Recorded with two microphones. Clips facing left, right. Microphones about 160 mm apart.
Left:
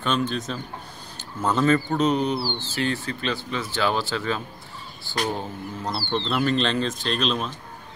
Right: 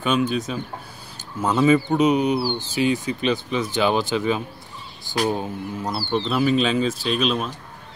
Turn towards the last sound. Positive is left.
turn(degrees=-5)  # may be behind; listen again after turning